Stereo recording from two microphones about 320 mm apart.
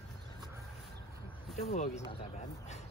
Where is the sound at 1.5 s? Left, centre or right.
Left.